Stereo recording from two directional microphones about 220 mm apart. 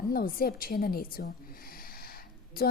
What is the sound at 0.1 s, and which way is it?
A woman's voice, 45° left (ahead or behind).